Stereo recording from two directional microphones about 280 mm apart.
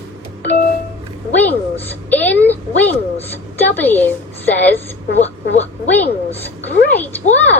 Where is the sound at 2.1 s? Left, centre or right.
Centre.